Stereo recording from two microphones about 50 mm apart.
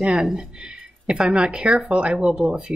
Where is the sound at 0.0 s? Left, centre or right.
Centre.